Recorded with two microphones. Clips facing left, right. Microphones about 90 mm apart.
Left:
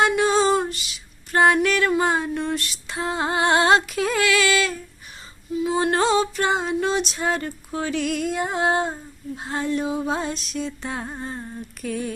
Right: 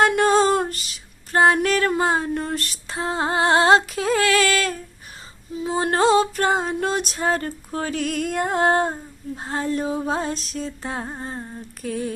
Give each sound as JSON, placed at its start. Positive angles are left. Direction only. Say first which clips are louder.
{"t": 0.0, "sound": "female singing", "louder": "right 2 dB", "side_deg": -50}
{"t": 1.5, "sound": "music", "louder": "even", "side_deg": -40}
{"t": 5.5, "sound": "music", "louder": "even", "side_deg": -35}